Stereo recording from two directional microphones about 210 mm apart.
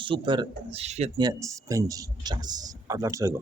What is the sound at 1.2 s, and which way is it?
Speech, 15° right (ahead or behind).